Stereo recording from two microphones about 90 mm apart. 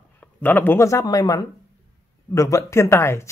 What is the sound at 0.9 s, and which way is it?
Speech, 40° left (ahead or behind).